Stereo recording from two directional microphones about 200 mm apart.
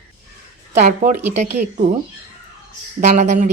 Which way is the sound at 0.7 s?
35° right (ahead or behind).